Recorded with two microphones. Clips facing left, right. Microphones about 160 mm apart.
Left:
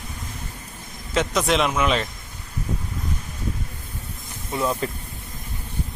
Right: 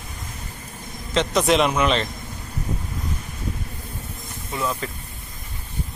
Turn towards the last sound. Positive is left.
turn(degrees=25)  # may be behind; listen again after turning